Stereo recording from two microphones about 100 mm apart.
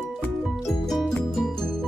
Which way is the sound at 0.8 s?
Centre (ahead or behind).